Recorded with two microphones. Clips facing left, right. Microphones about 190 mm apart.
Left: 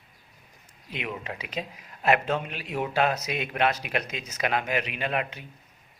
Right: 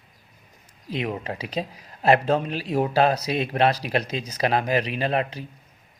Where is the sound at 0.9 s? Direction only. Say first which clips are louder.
Right 6 dB; 35° right (ahead or behind).